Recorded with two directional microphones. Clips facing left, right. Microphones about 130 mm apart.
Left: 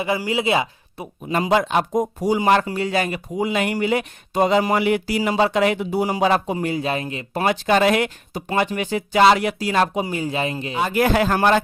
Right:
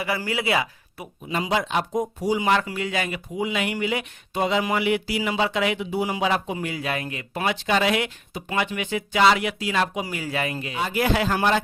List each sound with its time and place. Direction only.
0.0 s speech: 20° left (ahead or behind)
1.3 s speech: 50° left (ahead or behind); by 7.4 s 25° left (ahead or behind)
7.4 s speech: 45° left (ahead or behind)
10.0 s speech: 30° left (ahead or behind)
10.8 s speech: 50° left (ahead or behind)